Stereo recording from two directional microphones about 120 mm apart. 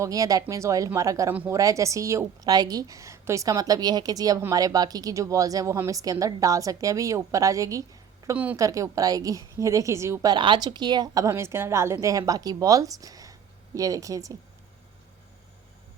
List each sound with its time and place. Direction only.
0.0 s a woman's voice: 30° right (ahead or behind)
1.3 s speech: 15° right (ahead or behind)
1.5 s a woman's voice: 25° right (ahead or behind)
8.2 s a sound: 25° right (ahead or behind)
8.5 s a woman's voice: 25° right (ahead or behind)
10.3 s a woman's voice: 40° right (ahead or behind)